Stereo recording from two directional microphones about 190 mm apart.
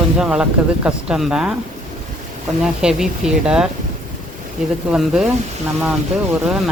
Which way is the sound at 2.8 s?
5° right (ahead or behind).